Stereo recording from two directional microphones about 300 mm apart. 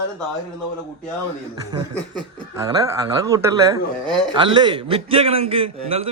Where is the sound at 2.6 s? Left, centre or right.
Centre.